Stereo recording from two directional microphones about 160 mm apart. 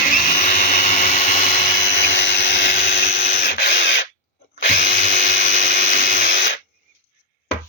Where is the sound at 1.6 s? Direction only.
85° left.